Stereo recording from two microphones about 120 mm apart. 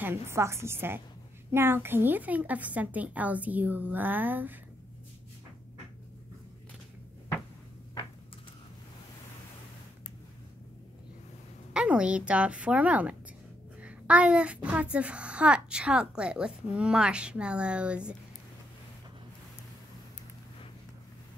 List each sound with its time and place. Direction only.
0.0 s a woman's voice: 20° right (ahead or behind)
11.7 s a woman's voice: 10° right (ahead or behind)